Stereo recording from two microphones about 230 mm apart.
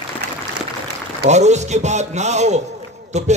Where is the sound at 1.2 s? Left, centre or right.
Right.